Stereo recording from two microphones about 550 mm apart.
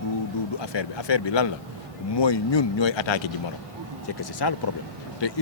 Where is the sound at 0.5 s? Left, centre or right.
Left.